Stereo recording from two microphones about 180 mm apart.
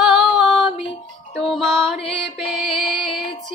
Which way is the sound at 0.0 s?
Centre (ahead or behind).